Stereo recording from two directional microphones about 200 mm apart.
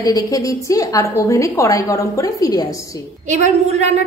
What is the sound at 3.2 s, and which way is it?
Speech, 35° right (ahead or behind).